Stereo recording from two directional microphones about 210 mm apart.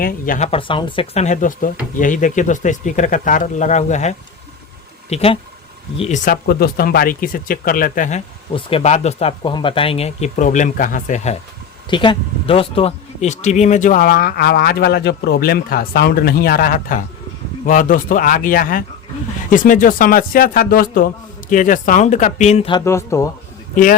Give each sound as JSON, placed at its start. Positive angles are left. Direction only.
{"t": 0.0, "sound": "speech", "side_deg": 35}
{"t": 6.3, "sound": "speech", "side_deg": 45}
{"t": 11.9, "sound": "speech", "side_deg": 25}
{"t": 22.8, "sound": "speech", "side_deg": 10}
{"t": 23.7, "sound": "speech", "side_deg": 40}